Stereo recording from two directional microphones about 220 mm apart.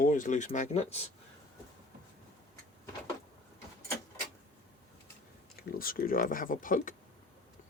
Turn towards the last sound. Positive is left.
turn(degrees=35)  # may be behind; listen again after turning